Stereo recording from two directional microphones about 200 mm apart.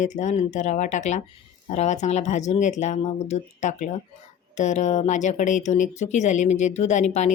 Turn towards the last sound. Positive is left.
turn(degrees=35)  # may be behind; listen again after turning